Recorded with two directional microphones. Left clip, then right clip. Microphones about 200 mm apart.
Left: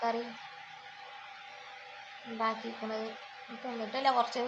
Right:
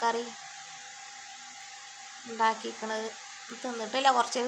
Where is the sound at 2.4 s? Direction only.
30° right (ahead or behind).